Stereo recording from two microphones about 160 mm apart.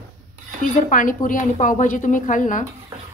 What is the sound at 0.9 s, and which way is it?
Speech, 55° left (ahead or behind).